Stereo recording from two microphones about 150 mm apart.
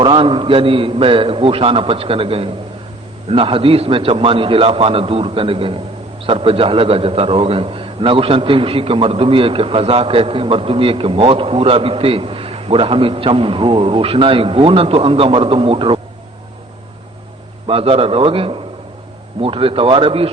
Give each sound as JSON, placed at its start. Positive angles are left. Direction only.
{"t": 0.0, "sound": "a man's voice", "side_deg": -35}
{"t": 17.7, "sound": "a man's voice", "side_deg": -40}